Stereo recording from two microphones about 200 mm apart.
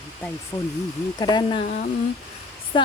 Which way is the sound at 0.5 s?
10° left (ahead or behind).